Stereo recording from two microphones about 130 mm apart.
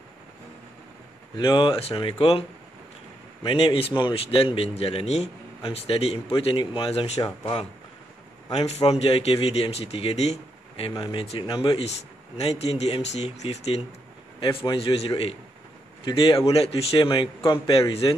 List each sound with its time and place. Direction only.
1.3 s speech: 35° left (ahead or behind)
3.4 s speech: 45° left (ahead or behind)
7.2 s speech: 35° left (ahead or behind)
8.6 s speech: 55° left (ahead or behind)
11.0 s speech: 40° left (ahead or behind)
12.4 s speech: 50° left (ahead or behind)